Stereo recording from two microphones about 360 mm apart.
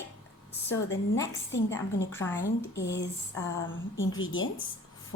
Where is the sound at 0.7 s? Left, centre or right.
Left.